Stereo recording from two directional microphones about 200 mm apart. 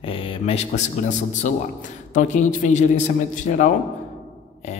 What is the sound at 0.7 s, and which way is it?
Speech, 40° left (ahead or behind).